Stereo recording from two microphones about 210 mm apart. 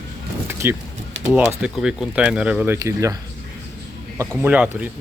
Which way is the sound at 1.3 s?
5° right (ahead or behind).